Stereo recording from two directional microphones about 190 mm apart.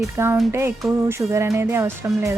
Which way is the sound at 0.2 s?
15° right (ahead or behind).